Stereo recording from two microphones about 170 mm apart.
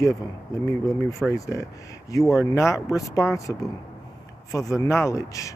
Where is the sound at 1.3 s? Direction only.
20° left (ahead or behind).